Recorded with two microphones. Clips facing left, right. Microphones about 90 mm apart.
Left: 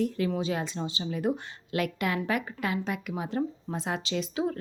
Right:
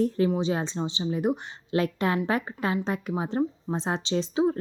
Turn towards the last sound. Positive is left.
turn(degrees=-25)  # may be behind; listen again after turning